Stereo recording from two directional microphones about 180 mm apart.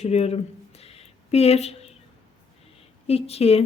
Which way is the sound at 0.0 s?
35° left (ahead or behind).